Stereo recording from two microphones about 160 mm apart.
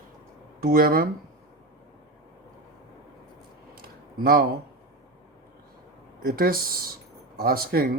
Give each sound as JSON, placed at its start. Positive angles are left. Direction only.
{"t": 0.6, "sound": "speech", "side_deg": -65}
{"t": 3.8, "sound": "a sound", "side_deg": -70}
{"t": 6.2, "sound": "speech", "side_deg": -65}